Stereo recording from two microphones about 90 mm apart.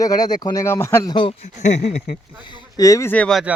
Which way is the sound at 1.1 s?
65° left (ahead or behind).